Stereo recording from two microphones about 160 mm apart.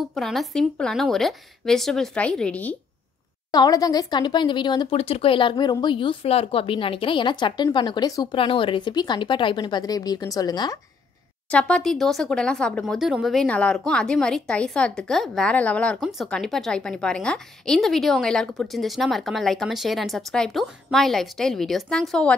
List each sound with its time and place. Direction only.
0.1 s speech: centre (ahead or behind)
3.5 s speech: 25° left (ahead or behind)
11.5 s speech: 5° left (ahead or behind)